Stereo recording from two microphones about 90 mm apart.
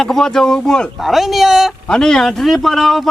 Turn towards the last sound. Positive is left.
turn(degrees=0)  # may be behind; listen again after turning